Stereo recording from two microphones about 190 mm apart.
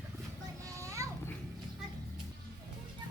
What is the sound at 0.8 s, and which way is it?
Children playing, 15° right (ahead or behind).